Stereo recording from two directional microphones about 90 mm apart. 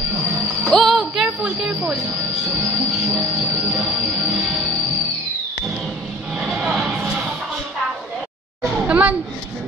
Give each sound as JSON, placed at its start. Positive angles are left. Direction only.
{"t": 0.7, "sound": "music", "side_deg": 0}
{"t": 1.7, "sound": "music", "side_deg": -20}
{"t": 3.1, "sound": "train", "side_deg": 0}
{"t": 3.7, "sound": "music", "side_deg": -15}
{"t": 6.4, "sound": "a sound", "side_deg": -5}
{"t": 8.8, "sound": "a sound", "side_deg": -15}